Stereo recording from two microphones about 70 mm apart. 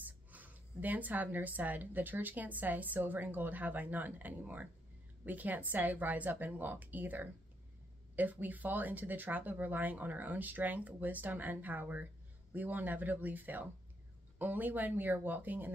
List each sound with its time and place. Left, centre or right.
0.0 s speech: right